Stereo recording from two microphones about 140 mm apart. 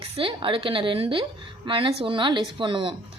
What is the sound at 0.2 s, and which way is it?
A woman's voice, 40° right (ahead or behind).